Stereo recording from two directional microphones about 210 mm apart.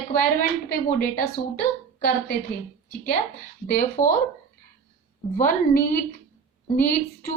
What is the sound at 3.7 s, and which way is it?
Speech, 40° left (ahead or behind).